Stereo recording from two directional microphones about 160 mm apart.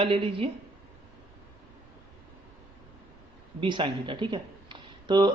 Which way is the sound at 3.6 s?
30° right (ahead or behind).